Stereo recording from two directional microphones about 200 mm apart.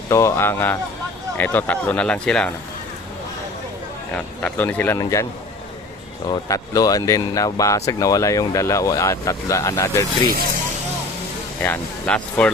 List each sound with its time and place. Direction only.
0.1 s speech: 15° left (ahead or behind)
4.1 s speech: 5° left (ahead or behind)
6.2 s speech: 20° left (ahead or behind)
11.6 s speech: 5° left (ahead or behind)